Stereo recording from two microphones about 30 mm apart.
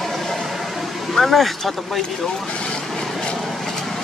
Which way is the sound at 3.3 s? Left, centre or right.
Centre.